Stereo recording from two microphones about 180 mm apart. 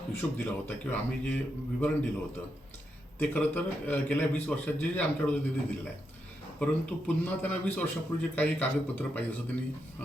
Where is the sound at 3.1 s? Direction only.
10° left (ahead or behind).